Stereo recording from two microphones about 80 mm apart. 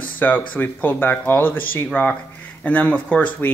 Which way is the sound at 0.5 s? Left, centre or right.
Left.